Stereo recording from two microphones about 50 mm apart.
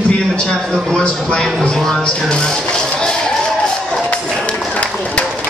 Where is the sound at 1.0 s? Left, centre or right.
Left.